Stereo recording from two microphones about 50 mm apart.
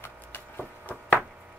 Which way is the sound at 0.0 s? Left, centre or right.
Left.